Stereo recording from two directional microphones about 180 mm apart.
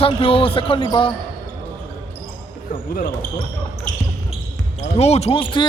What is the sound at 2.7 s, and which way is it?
Speech, 45° left (ahead or behind).